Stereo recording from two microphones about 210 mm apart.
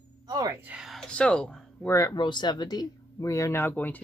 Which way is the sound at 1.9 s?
20° left (ahead or behind).